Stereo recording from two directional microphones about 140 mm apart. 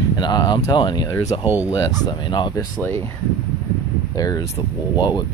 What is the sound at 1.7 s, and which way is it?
Speech, 30° left (ahead or behind).